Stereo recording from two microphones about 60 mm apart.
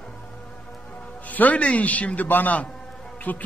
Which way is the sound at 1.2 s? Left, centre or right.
Left.